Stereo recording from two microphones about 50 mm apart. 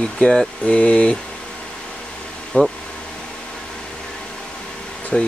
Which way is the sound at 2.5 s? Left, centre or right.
Left.